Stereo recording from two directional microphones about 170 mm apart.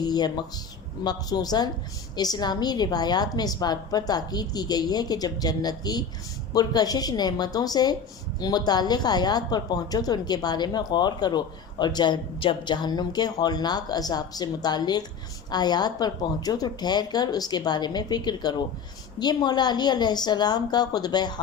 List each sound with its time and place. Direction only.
0.0 s speech: 25° left (ahead or behind)